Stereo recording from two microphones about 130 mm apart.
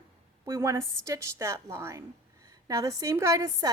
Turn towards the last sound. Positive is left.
turn(degrees=-25)  # may be behind; listen again after turning